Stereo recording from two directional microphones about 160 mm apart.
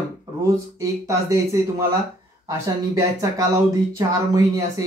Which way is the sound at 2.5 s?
20° right (ahead or behind).